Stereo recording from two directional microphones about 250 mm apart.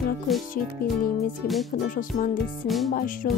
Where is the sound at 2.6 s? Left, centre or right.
Centre.